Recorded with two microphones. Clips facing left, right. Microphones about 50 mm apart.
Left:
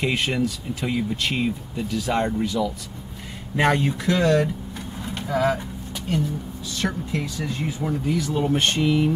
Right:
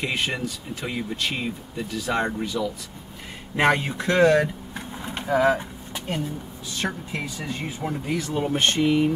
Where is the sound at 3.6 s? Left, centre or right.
Right.